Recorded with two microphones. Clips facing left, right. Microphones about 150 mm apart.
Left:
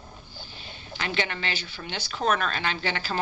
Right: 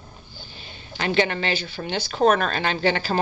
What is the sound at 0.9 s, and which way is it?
Speech, 40° right (ahead or behind).